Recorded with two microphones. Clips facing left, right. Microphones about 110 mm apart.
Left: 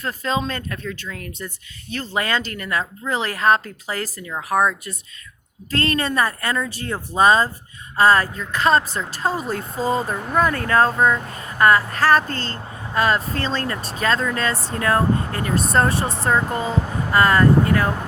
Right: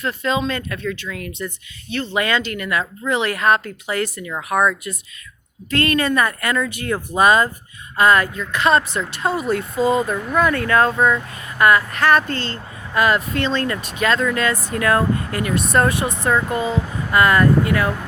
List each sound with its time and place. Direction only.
0.0 s speech: 40° left (ahead or behind)